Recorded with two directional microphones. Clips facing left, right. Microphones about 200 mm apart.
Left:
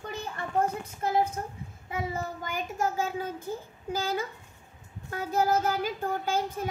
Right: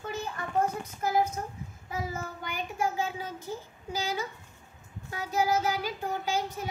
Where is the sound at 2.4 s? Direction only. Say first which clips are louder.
Even; 45° left (ahead or behind).